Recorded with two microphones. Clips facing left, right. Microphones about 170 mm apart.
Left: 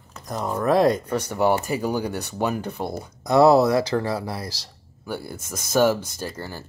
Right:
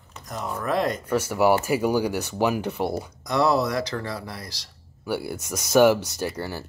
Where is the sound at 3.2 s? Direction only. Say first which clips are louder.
Left 7 dB; 30° left (ahead or behind).